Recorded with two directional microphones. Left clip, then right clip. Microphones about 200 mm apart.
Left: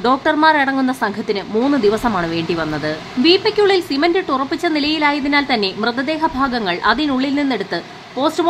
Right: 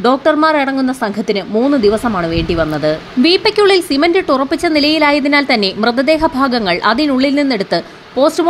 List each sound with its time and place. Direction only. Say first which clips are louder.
0.0 s speech: right 3 dB; 15° right (ahead or behind)